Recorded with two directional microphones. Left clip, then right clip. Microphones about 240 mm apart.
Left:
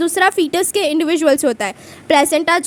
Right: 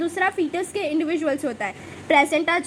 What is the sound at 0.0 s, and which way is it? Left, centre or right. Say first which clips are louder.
A woman's voice: left 8 dB; left.